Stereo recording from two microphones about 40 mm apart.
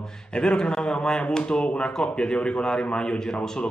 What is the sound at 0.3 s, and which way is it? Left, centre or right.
Speech, left.